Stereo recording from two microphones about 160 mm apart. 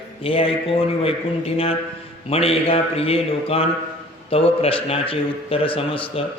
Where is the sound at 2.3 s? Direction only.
35° left (ahead or behind).